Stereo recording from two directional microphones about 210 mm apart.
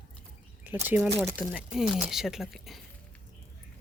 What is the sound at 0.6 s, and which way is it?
Speech, 10° right (ahead or behind).